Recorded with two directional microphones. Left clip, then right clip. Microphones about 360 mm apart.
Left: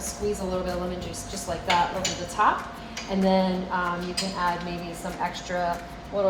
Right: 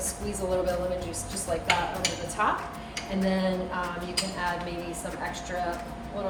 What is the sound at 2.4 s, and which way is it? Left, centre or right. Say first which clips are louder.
Speech: left 5 dB; centre.